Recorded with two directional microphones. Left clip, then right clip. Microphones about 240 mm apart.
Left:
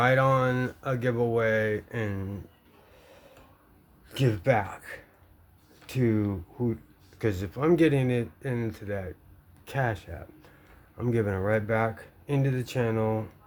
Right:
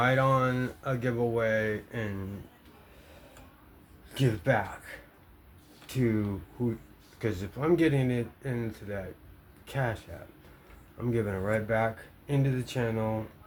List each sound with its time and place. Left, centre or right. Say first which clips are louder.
0.0 s speech: left 2 dB; left
4.1 s speech: left 3 dB; left